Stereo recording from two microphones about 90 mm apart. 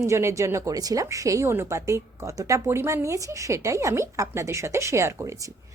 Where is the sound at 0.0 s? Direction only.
30° right (ahead or behind).